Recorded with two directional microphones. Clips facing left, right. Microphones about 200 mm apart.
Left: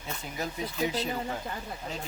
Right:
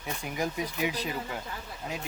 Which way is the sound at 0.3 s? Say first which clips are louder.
Right 1 dB; 15° right (ahead or behind).